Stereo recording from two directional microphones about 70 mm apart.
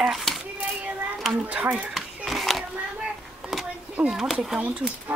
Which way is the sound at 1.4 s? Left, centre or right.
Right.